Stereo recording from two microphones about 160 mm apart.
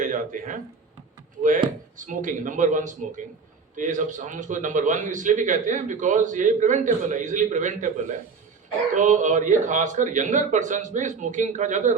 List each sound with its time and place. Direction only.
0.0 s a sound: 55° right (ahead or behind)
1.4 s a man's voice: 55° right (ahead or behind)
9.0 s a man's voice: 50° right (ahead or behind)